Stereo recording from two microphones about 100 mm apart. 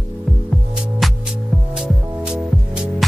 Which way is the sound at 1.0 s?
Centre (ahead or behind).